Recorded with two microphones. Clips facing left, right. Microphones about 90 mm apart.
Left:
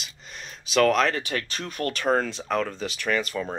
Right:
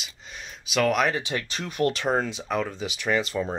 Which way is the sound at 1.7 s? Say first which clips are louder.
Even; 20° right (ahead or behind).